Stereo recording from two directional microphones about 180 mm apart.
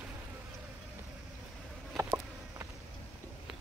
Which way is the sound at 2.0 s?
15° right (ahead or behind).